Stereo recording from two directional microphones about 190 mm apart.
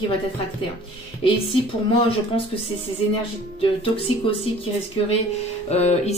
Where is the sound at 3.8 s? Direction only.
30° left (ahead or behind).